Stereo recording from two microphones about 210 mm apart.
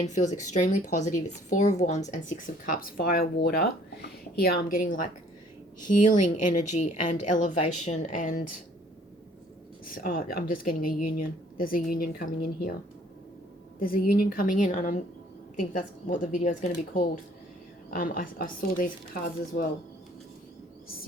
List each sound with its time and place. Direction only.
0.0 s speech: 35° left (ahead or behind)
7.5 s a woman's voice: 90° left
7.9 s speech: 35° left (ahead or behind)
9.9 s speech: 40° left (ahead or behind)
13.7 s speech: 45° left (ahead or behind)